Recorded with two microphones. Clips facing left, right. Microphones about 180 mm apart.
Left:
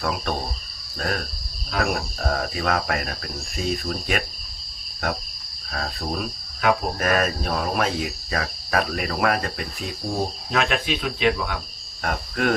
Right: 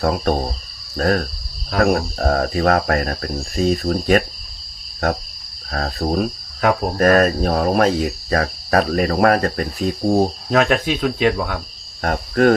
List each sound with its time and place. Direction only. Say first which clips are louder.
0.0 s cricket: right 8 dB; 40° right (ahead or behind)
5.7 s cricket: right 8 dB; 40° right (ahead or behind)